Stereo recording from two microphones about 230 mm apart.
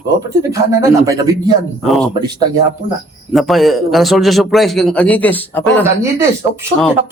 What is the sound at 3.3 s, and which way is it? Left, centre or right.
A man's voice, centre.